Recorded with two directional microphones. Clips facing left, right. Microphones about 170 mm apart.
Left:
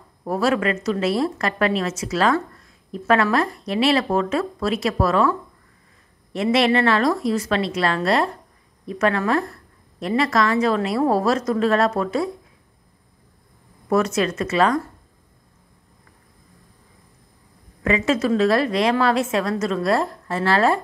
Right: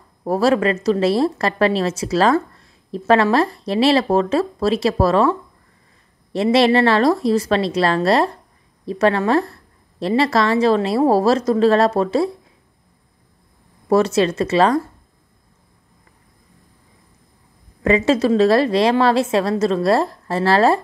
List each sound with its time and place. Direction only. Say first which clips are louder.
0.2 s a woman's voice: right 4 dB; 35° right (ahead or behind)
6.3 s a woman's voice: right 4 dB; 35° right (ahead or behind)
13.8 s a woman's voice: right 4 dB; 30° right (ahead or behind)
17.8 s a woman's voice: right 4 dB; 35° right (ahead or behind)